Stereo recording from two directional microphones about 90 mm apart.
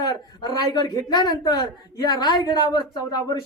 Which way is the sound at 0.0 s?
45° left (ahead or behind).